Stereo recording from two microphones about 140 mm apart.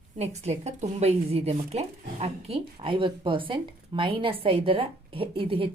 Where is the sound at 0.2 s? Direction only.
50° right (ahead or behind).